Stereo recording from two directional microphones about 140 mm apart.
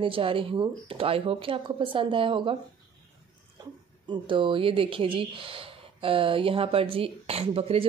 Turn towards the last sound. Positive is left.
turn(degrees=-45)  # may be behind; listen again after turning